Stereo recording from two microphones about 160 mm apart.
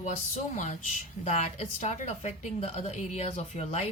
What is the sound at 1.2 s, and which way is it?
A woman's voice, 45° left (ahead or behind).